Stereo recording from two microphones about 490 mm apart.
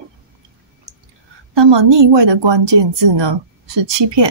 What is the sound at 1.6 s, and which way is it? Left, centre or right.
Speech, right.